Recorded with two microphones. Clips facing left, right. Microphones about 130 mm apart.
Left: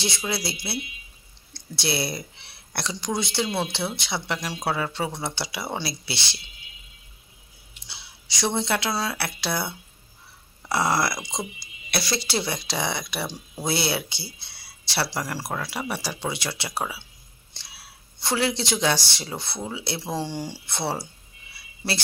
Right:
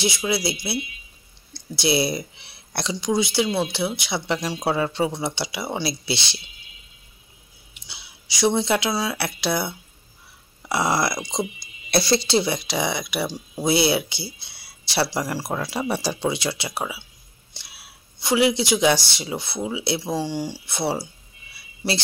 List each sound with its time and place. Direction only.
0.0 s speech: 10° right (ahead or behind)
4.3 s speech: 20° right (ahead or behind)
7.7 s a sound: 10° right (ahead or behind)
8.9 s speech: 5° right (ahead or behind)
9.2 s speech: 15° right (ahead or behind)
11.1 s speech: 5° left (ahead or behind)
11.9 s speech: 30° right (ahead or behind); by 17.0 s 15° right (ahead or behind)
17.6 s a sound: 10° right (ahead or behind)
18.2 s speech: 10° right (ahead or behind)